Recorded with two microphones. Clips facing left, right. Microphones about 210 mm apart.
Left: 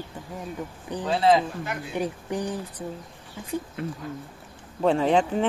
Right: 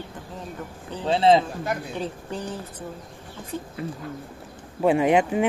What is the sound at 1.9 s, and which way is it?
Speech, 15° left (ahead or behind).